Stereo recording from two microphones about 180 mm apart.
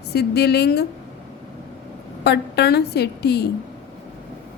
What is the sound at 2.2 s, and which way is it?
A woman's voice, 65° left (ahead or behind).